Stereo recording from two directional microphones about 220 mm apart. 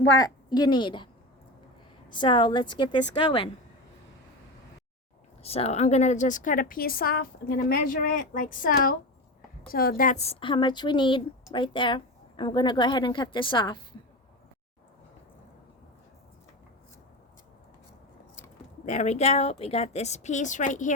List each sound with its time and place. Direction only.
0.2 s a woman's voice: 20° left (ahead or behind)
2.0 s a woman's voice: 20° left (ahead or behind)
5.4 s a woman's voice: 25° left (ahead or behind)
18.9 s a woman's voice: 30° left (ahead or behind)